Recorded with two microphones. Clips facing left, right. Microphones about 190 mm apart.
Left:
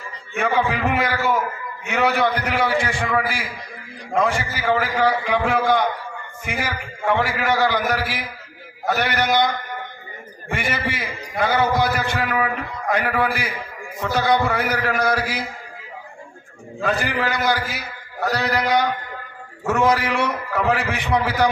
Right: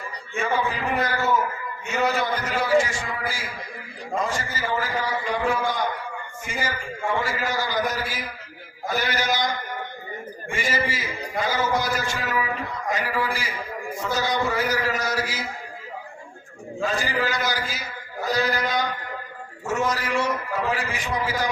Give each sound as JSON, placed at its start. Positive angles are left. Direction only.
{"t": 0.3, "sound": "a man's voice", "side_deg": 70}
{"t": 10.5, "sound": "a man's voice", "side_deg": 60}
{"t": 16.8, "sound": "a man's voice", "side_deg": 60}